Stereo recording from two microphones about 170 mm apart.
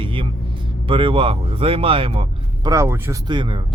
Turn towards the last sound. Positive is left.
turn(degrees=-30)  # may be behind; listen again after turning